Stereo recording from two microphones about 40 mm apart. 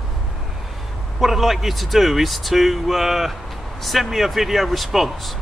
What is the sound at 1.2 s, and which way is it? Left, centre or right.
Speech, centre.